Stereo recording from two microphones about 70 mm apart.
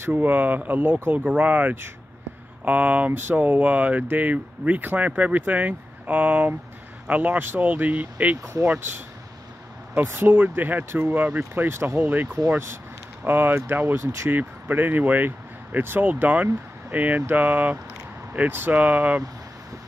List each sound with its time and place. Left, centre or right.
0.1 s speech: right
3.1 s speech: right
8.7 s speech: right
10.0 s speech: right
14.3 s speech: right